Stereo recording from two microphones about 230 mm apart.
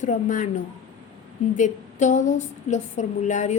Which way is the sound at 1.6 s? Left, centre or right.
Left.